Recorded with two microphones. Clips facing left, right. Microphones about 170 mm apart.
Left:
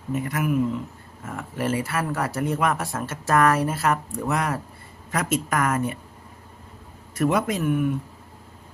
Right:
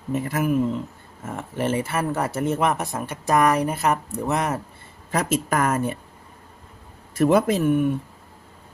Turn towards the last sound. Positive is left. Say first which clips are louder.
# right 3 dB
turn(degrees=-30)  # may be behind; listen again after turning